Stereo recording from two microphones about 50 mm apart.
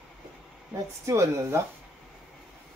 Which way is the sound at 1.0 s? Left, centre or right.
Right.